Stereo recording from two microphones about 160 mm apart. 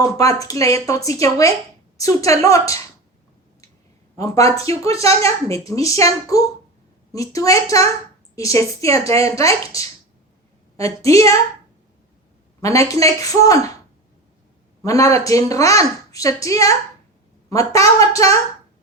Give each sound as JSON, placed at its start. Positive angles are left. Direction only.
{"t": 0.2, "sound": "a child's voice", "side_deg": 20}
{"t": 4.2, "sound": "a child's voice", "side_deg": 20}
{"t": 12.6, "sound": "a child's voice", "side_deg": 20}
{"t": 14.8, "sound": "a child's voice", "side_deg": 20}